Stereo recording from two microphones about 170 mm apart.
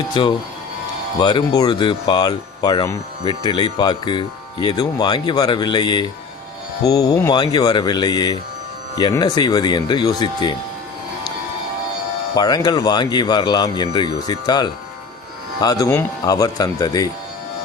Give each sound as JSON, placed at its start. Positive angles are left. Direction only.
{"t": 0.1, "sound": "speech", "side_deg": 25}
{"t": 12.3, "sound": "speech", "side_deg": 25}